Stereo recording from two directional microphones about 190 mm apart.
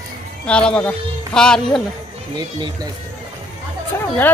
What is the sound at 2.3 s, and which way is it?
Speech, 20° right (ahead or behind).